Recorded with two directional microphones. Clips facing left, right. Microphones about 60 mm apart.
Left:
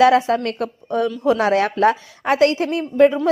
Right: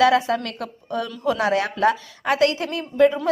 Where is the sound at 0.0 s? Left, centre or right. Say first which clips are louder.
Left 4 dB; left.